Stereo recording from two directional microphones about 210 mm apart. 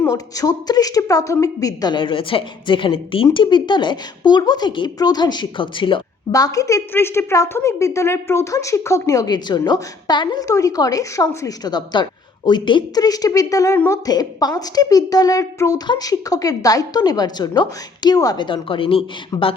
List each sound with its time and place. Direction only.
0.0 s a woman's voice: 15° left (ahead or behind)